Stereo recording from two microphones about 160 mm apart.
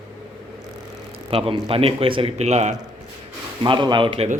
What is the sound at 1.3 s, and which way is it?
A man's voice, 35° right (ahead or behind).